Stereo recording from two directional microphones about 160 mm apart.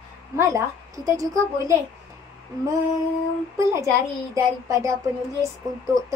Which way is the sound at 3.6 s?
20° right (ahead or behind).